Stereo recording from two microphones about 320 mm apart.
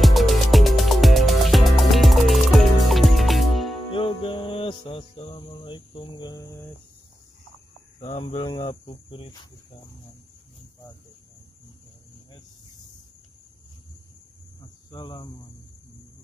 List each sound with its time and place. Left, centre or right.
0.0 s music: centre
3.9 s music: centre
8.0 s speech: centre
14.6 s cricket: centre